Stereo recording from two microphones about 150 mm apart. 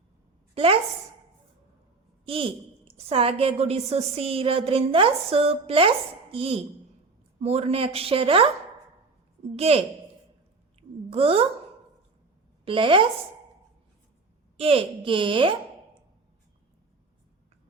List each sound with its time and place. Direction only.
0.5 s a woman's voice: 40° right (ahead or behind)
2.2 s a woman's voice: 35° right (ahead or behind)
9.6 s a woman's voice: 45° right (ahead or behind)
10.8 s a sound: 40° right (ahead or behind)
12.6 s a woman's voice: 35° right (ahead or behind)
14.5 s a woman's voice: 40° right (ahead or behind)